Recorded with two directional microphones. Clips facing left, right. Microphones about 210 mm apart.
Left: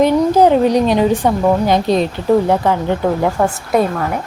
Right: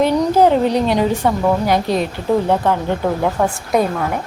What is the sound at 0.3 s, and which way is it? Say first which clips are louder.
A woman's voice: left 2 dB; 15° left (ahead or behind).